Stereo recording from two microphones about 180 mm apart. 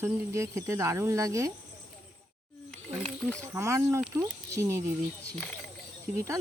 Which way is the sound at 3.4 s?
15° right (ahead or behind).